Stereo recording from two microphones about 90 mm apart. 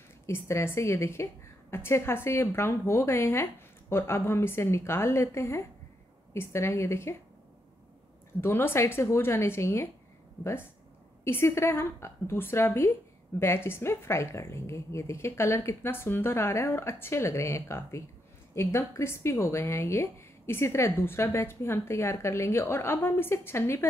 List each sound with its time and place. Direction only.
0.3 s speech: 30° left (ahead or behind)
8.4 s speech: 30° left (ahead or behind)